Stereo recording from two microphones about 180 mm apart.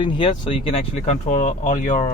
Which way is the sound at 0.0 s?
25° left (ahead or behind).